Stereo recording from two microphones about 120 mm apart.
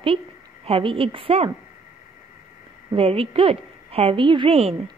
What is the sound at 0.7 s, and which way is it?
Speech, 50° right (ahead or behind).